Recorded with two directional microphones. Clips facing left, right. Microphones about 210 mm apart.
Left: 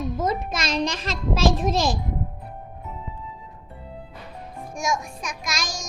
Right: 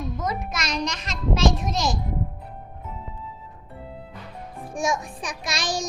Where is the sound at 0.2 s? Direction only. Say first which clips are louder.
Left 4 dB; 30° left (ahead or behind).